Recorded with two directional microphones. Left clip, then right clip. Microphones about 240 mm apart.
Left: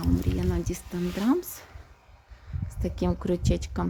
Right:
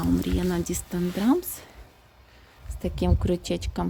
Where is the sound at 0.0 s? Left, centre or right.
Right.